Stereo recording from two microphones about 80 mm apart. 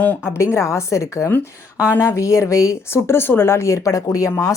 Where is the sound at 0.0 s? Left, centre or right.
Left.